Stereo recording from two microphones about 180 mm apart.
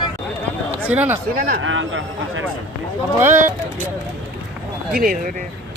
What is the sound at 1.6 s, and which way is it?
Speech, 90° right.